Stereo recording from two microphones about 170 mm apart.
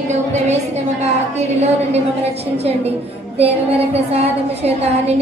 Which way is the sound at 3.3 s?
35° right (ahead or behind).